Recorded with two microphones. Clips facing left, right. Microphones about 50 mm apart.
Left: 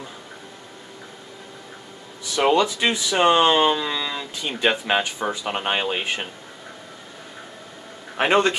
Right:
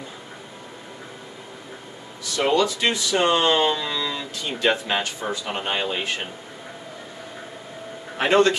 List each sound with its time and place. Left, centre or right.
2.3 s speech: left
8.2 s speech: centre